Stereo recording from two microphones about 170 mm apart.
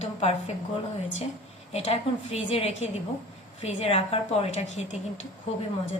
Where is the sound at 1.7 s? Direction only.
40° left (ahead or behind).